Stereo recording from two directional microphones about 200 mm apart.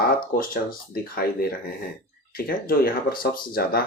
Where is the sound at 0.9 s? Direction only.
45° left (ahead or behind).